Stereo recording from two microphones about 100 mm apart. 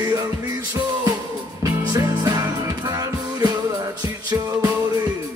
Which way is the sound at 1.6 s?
35° right (ahead or behind).